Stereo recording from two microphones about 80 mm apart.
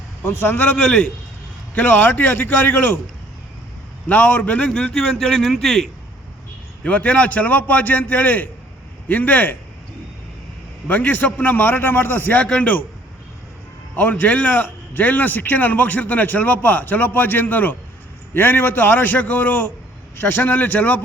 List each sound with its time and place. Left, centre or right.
0.2 s a man's voice: left
4.1 s a man's voice: left; by 5.9 s centre
6.8 s a man's voice: centre
10.8 s a man's voice: left
13.9 s a man's voice: left